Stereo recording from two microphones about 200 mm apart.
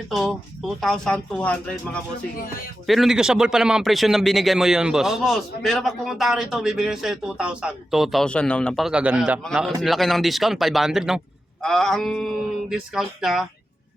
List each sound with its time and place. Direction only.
0.1 s a man's voice: centre (ahead or behind)